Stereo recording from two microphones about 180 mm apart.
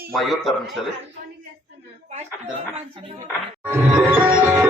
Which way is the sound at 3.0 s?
25° right (ahead or behind).